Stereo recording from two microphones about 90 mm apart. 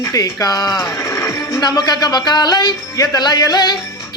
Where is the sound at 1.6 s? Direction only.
50° left (ahead or behind).